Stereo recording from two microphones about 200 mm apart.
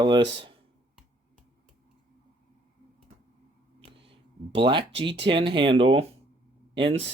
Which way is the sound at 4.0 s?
30° right (ahead or behind).